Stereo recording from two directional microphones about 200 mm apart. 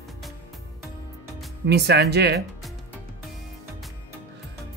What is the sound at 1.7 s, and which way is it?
Speech, 55° right (ahead or behind).